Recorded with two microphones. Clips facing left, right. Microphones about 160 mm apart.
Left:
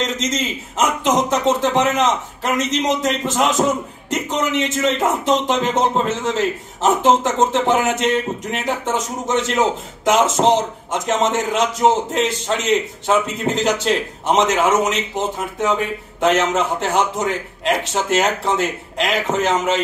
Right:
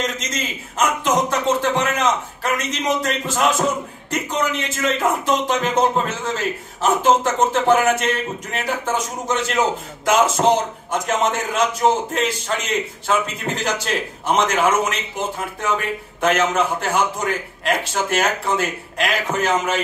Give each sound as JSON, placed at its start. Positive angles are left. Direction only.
{"t": 0.7, "sound": "a man's voice", "side_deg": 20}